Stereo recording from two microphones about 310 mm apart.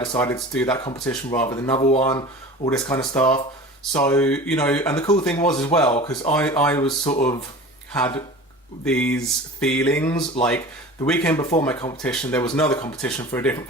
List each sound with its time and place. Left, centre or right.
0.0 s speech: centre
5.9 s speech: centre
6.3 s speech: centre
8.8 s speech: centre